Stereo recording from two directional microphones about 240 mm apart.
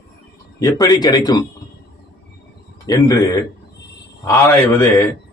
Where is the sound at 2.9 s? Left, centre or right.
Centre.